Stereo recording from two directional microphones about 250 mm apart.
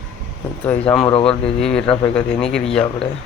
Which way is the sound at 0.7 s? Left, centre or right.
Centre.